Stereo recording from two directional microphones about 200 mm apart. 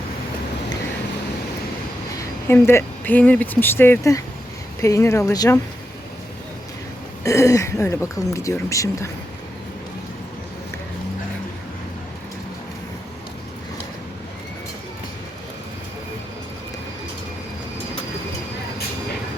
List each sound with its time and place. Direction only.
2.1 s speech: 10° left (ahead or behind)
7.3 s speech: 15° left (ahead or behind)